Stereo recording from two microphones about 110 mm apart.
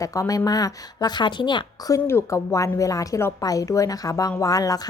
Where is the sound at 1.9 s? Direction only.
25° left (ahead or behind).